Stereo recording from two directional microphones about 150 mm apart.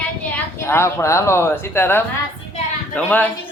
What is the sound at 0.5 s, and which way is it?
Speech, 15° left (ahead or behind).